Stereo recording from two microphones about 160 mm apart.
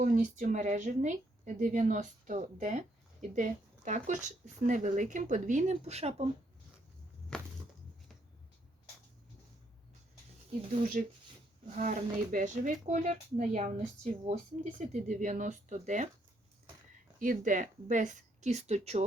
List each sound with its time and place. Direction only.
0.0 s a woman's voice: 55° right (ahead or behind)
7.3 s a sound: 5° left (ahead or behind)
11.0 s a woman's voice: 60° right (ahead or behind)
17.2 s a woman's voice: 55° right (ahead or behind)